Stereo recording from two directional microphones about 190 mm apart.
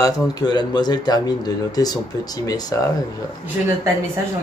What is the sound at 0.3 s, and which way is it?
Speech, 20° left (ahead or behind).